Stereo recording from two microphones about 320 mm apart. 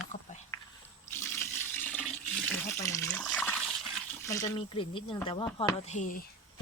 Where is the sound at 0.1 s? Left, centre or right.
Left.